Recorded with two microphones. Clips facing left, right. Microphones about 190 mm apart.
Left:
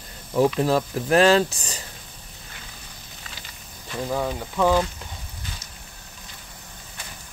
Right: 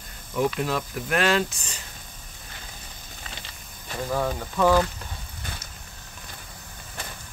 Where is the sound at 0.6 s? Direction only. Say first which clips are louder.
Left 6 dB; 35° left (ahead or behind).